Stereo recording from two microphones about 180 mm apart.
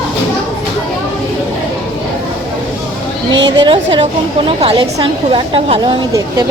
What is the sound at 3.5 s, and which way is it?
A woman's voice, 25° right (ahead or behind).